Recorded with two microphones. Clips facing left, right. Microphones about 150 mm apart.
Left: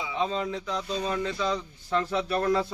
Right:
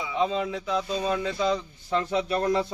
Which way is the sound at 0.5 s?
10° right (ahead or behind).